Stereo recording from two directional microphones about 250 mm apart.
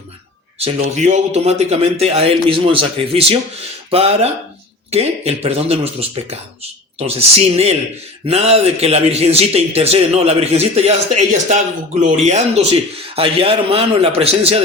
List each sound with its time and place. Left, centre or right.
0.6 s a man's voice: right